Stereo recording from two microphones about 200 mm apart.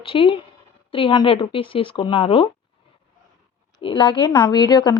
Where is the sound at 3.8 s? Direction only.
25° left (ahead or behind).